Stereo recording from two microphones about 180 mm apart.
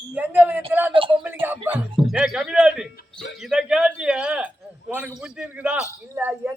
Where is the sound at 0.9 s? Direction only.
30° right (ahead or behind).